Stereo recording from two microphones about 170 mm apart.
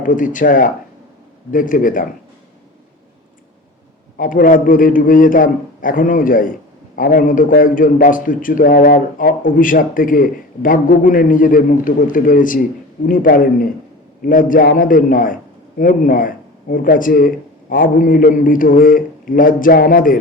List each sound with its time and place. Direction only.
0.0 s a man's voice: 50° left (ahead or behind)
4.2 s a man's voice: 55° left (ahead or behind)